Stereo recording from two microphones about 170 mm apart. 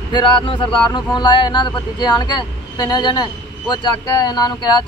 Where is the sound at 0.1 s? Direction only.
25° left (ahead or behind).